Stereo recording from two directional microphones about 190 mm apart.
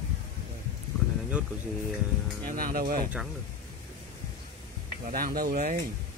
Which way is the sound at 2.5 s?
50° right (ahead or behind).